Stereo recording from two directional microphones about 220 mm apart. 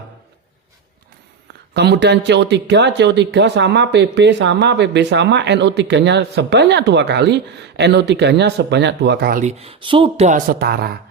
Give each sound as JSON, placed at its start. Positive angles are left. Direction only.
{"t": 1.7, "sound": "speech", "side_deg": -50}